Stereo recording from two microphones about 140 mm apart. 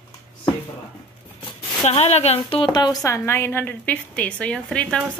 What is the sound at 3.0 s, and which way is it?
A woman's voice, 20° left (ahead or behind).